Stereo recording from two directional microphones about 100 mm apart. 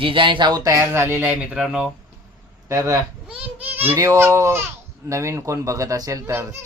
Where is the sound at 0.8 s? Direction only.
25° right (ahead or behind).